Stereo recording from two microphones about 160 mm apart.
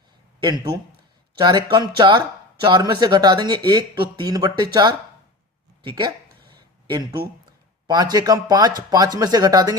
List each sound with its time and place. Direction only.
1.4 s speech: 25° right (ahead or behind)
7.9 s speech: 25° right (ahead or behind)